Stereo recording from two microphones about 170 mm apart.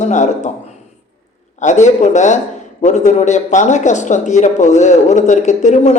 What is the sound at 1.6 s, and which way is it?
Speech, 45° left (ahead or behind).